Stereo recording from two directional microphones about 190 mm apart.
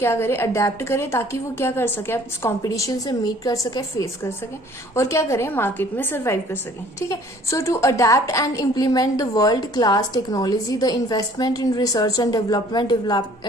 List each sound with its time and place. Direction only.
0.0 s a woman's voice: 15° left (ahead or behind)